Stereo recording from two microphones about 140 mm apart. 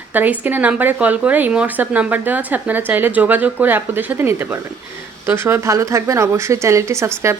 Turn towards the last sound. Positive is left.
turn(degrees=-20)  # may be behind; listen again after turning